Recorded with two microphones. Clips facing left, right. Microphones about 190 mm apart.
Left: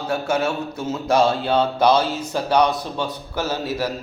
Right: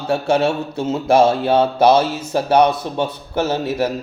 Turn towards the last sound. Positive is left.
turn(degrees=-25)  # may be behind; listen again after turning